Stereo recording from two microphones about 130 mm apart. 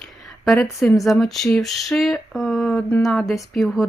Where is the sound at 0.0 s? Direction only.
Centre (ahead or behind).